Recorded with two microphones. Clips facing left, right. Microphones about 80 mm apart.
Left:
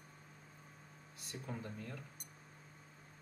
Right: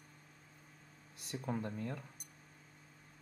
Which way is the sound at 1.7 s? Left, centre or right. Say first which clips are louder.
Right 6 dB; right.